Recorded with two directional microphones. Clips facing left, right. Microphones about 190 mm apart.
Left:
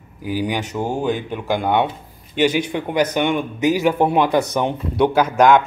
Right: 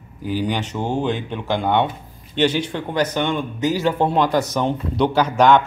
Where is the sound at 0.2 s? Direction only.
10° left (ahead or behind).